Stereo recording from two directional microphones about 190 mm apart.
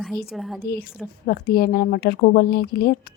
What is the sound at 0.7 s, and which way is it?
Speech, 50° left (ahead or behind).